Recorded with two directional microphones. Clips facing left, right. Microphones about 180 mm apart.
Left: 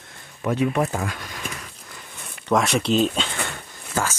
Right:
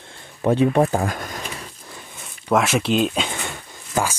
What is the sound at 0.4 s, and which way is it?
Speech, 30° right (ahead or behind).